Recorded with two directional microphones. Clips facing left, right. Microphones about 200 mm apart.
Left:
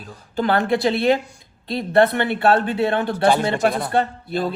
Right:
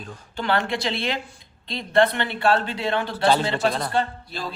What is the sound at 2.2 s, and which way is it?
Speech, 55° left (ahead or behind).